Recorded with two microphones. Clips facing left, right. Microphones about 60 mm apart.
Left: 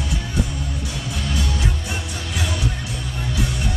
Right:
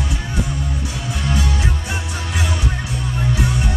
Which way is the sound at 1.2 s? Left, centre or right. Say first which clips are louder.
Right 4 dB; right.